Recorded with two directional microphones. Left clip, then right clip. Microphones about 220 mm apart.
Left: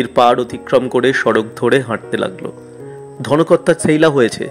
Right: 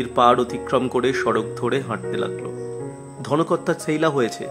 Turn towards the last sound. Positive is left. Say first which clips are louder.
# left 8 dB
turn(degrees=20)  # may be behind; listen again after turning